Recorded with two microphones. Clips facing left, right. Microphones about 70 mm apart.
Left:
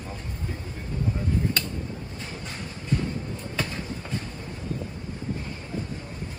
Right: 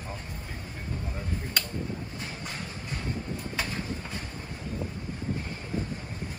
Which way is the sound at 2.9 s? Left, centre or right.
Right.